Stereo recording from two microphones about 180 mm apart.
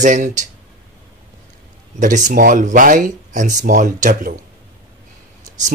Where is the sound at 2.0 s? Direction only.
45° right (ahead or behind).